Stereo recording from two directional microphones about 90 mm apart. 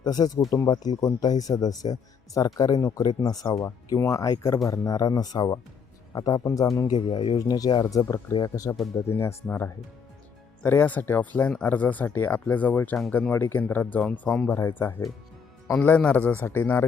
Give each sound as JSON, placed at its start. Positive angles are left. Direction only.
{"t": 0.0, "sound": "speech", "side_deg": 50}
{"t": 6.9, "sound": "speech", "side_deg": 60}
{"t": 9.0, "sound": "speech", "side_deg": 30}